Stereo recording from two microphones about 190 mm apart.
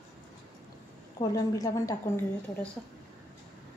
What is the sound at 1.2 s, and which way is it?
Speech, 20° left (ahead or behind).